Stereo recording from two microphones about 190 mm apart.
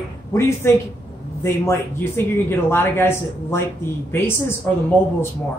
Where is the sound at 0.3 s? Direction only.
15° left (ahead or behind).